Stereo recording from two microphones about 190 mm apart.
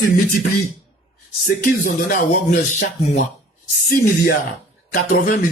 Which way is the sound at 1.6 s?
45° left (ahead or behind).